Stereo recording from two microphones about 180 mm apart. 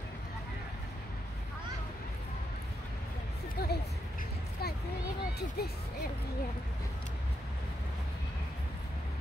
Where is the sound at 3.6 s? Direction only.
60° left (ahead or behind).